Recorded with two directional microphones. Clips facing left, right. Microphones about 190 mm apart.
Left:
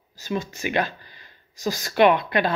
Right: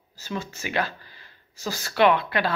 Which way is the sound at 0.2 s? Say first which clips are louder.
Left 5 dB; 15° left (ahead or behind).